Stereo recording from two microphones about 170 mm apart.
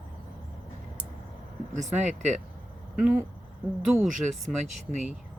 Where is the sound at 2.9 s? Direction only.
5° right (ahead or behind).